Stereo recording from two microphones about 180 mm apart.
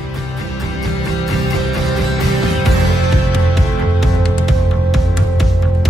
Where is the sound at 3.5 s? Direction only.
Centre (ahead or behind).